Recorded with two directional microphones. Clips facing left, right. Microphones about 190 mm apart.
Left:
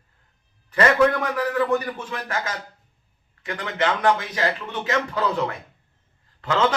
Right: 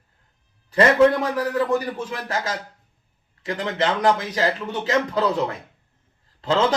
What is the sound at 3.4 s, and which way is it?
Speech, 30° right (ahead or behind).